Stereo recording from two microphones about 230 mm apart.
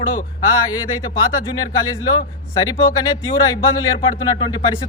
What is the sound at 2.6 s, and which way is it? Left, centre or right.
Speech, centre.